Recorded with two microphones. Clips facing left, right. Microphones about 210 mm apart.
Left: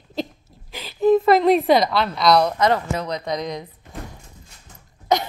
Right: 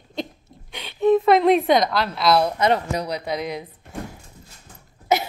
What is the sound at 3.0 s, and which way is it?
Speech, 10° right (ahead or behind).